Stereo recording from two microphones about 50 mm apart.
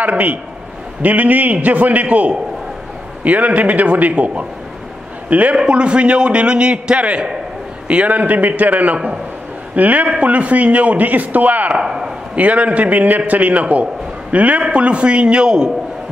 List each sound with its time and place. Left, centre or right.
1.0 s a man's voice: right
11.8 s a man's voice: centre
12.4 s a man's voice: right